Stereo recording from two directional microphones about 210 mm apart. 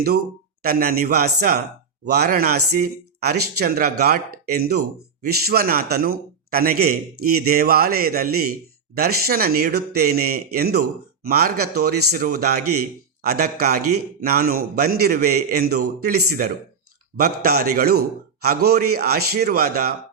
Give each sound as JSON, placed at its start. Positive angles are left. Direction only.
{"t": 0.6, "sound": "speech", "side_deg": -45}